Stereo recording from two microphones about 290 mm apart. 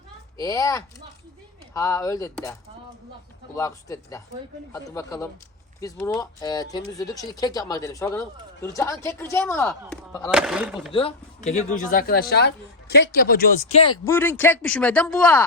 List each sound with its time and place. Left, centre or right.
0.3 s speech: centre
10.3 s speech: centre
10.9 s speech: left; by 15.4 s centre